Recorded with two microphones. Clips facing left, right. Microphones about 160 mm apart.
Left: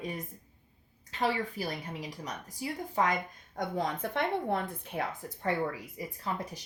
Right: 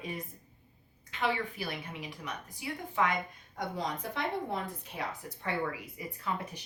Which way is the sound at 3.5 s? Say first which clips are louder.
Left 3 dB; 50° left (ahead or behind).